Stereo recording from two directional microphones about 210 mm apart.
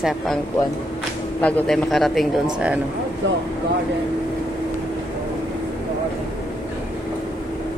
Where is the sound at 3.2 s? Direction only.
60° right (ahead or behind).